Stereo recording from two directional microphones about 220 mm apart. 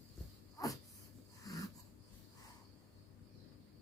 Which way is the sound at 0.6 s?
15° left (ahead or behind).